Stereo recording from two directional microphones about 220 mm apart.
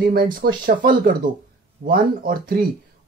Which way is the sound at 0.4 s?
40° right (ahead or behind).